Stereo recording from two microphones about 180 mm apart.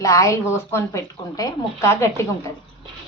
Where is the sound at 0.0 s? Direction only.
15° left (ahead or behind).